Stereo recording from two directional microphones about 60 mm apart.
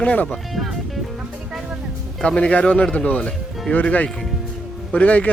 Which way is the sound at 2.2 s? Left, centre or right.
Centre.